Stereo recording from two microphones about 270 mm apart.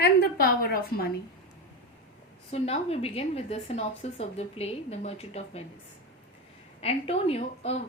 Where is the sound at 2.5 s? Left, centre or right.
Left.